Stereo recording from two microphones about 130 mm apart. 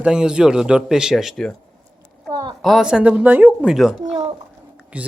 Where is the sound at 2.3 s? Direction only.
30° right (ahead or behind).